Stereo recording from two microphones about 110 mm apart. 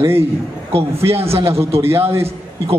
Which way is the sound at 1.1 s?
65° right (ahead or behind).